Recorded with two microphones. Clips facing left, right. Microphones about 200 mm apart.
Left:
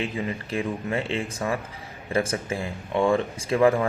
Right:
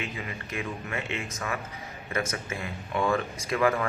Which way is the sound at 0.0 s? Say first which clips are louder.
Left 7 dB; 30° left (ahead or behind).